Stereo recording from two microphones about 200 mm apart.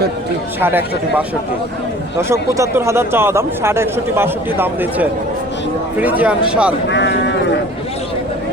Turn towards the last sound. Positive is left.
turn(degrees=60)  # may be behind; listen again after turning